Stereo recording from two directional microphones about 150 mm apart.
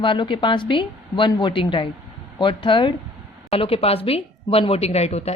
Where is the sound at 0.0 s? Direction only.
30° left (ahead or behind).